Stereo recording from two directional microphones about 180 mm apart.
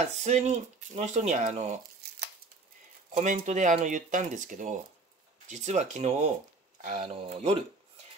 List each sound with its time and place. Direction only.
0.0 s speech: 40° right (ahead or behind)
3.2 s speech: 40° right (ahead or behind)